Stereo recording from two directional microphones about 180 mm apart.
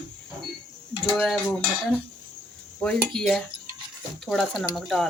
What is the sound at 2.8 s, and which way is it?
Speech, 5° left (ahead or behind).